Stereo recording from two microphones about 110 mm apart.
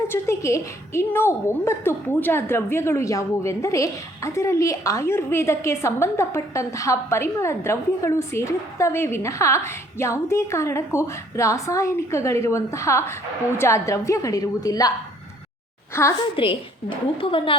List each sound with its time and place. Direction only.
0.1 s a woman's voice: 25° left (ahead or behind)
15.9 s a woman's voice: 25° left (ahead or behind)
16.2 s a woman's voice: 50° left (ahead or behind)